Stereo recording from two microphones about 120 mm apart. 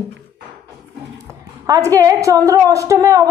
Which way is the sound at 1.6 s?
30° right (ahead or behind).